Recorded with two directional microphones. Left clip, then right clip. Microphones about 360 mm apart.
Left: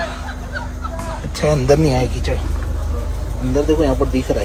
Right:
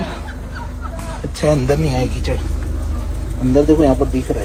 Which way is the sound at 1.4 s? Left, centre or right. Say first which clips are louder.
Left 2 dB; centre.